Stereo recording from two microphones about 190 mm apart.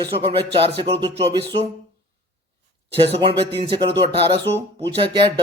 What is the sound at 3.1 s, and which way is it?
Speech, 30° right (ahead or behind).